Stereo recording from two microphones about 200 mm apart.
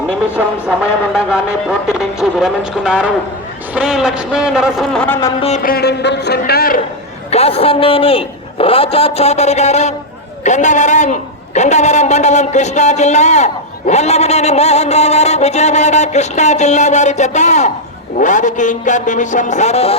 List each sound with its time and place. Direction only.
0.3 s speech: 5° right (ahead or behind)
5.0 s a sound: 10° left (ahead or behind)
5.4 s speech: 35° left (ahead or behind)
7.3 s a man's voice: 30° left (ahead or behind)